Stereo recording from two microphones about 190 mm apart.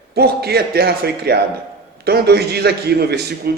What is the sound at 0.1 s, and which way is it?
A man's voice, 55° right (ahead or behind).